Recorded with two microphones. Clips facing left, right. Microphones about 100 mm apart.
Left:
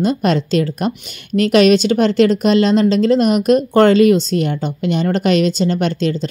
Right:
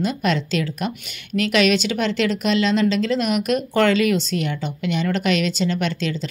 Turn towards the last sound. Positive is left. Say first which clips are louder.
# left 6 dB
turn(degrees=40)  # may be behind; listen again after turning